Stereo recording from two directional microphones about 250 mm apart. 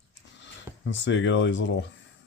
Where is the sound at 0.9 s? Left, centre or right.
Left.